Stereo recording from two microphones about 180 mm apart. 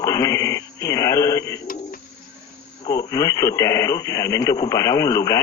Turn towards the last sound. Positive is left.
turn(degrees=20)  # may be behind; listen again after turning